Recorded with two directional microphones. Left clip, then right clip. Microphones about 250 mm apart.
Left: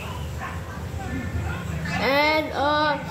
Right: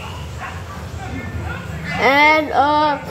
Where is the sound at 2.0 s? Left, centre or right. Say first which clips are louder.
Right 8 dB; right.